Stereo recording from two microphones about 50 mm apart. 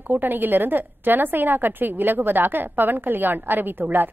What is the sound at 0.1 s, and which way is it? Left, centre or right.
Speech, right.